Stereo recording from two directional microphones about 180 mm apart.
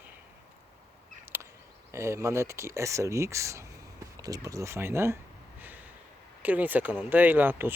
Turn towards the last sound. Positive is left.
turn(degrees=-10)  # may be behind; listen again after turning